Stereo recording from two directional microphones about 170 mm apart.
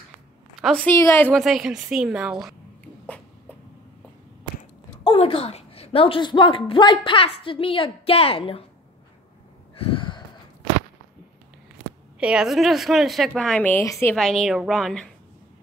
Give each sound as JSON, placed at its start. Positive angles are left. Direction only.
{"t": 0.6, "sound": "a woman's voice", "side_deg": 0}
{"t": 0.8, "sound": "a woman's voice", "side_deg": 15}
{"t": 1.3, "sound": "a woman's voice", "side_deg": 0}
{"t": 5.0, "sound": "a woman's voice", "side_deg": 35}
{"t": 9.8, "sound": "a sound", "side_deg": 30}
{"t": 12.2, "sound": "a woman's voice", "side_deg": -5}
{"t": 14.1, "sound": "a woman's voice", "side_deg": 0}